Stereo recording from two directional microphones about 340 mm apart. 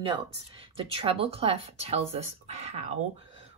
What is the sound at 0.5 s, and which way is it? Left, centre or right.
Speech, centre.